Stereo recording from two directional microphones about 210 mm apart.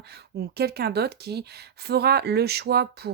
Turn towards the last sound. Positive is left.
turn(degrees=-50)  # may be behind; listen again after turning